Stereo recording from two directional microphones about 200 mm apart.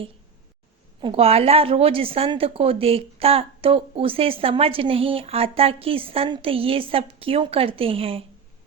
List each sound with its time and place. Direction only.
1.0 s a woman's voice: 30° right (ahead or behind)